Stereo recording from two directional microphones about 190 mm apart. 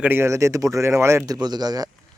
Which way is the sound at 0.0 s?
10° right (ahead or behind).